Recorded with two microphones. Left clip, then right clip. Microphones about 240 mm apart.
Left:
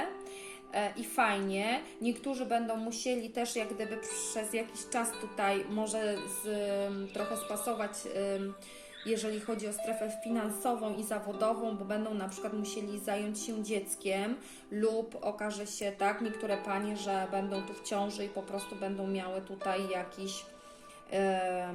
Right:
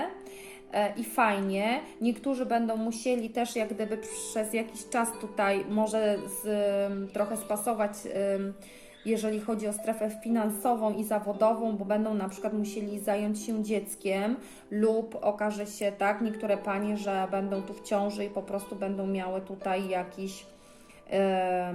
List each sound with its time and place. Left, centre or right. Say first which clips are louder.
0.7 s speech: right 5 dB; right